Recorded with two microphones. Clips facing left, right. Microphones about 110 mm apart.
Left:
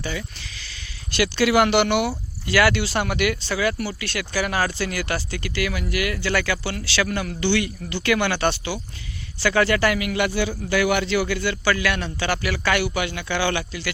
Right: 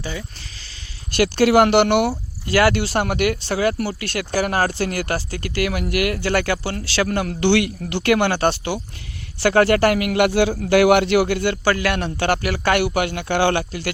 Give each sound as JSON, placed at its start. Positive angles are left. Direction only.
{"t": 0.0, "sound": "speech", "side_deg": -30}
{"t": 1.1, "sound": "speech", "side_deg": -50}
{"t": 7.4, "sound": "speech", "side_deg": -75}
{"t": 11.5, "sound": "speech", "side_deg": -45}